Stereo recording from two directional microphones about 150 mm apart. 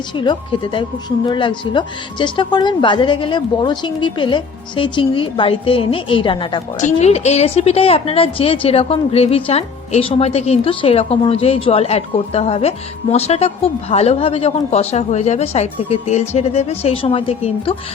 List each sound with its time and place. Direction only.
0.2 s speech: 30° left (ahead or behind)
6.7 s a woman's voice: 50° left (ahead or behind)